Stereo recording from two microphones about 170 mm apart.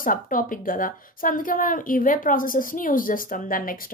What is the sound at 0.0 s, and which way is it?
A woman's voice, 55° left (ahead or behind).